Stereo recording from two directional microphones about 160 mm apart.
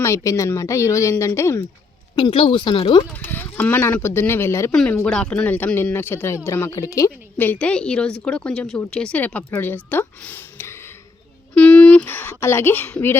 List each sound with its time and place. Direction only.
0.0 s a man's voice: 20° left (ahead or behind)
2.1 s speech: 30° left (ahead or behind)
3.1 s a man's voice: 10° left (ahead or behind)
4.7 s a man's voice: 5° left (ahead or behind)